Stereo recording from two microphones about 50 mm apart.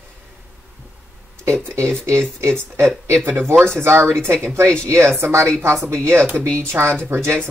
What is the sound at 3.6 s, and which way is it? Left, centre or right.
Speech, right.